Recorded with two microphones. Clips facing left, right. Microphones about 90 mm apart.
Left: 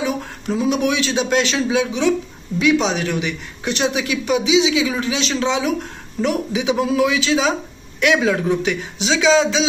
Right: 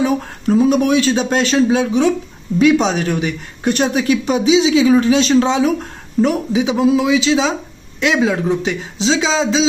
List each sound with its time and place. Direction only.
0.0 s a woman's voice: 40° right (ahead or behind)